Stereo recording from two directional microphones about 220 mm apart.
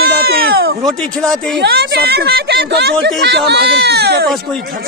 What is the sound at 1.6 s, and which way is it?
A woman's voice, 45° right (ahead or behind).